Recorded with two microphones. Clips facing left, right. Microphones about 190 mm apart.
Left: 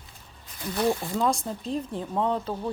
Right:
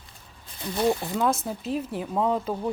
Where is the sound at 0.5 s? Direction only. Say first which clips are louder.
Right 1 dB; 20° right (ahead or behind).